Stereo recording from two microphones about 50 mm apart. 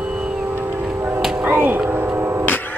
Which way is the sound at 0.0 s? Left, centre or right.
Centre.